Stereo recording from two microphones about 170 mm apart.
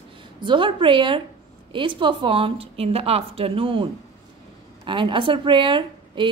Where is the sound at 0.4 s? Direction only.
30° right (ahead or behind).